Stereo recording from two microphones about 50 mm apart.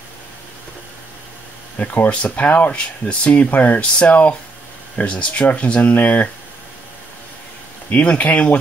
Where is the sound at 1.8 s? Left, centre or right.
Left.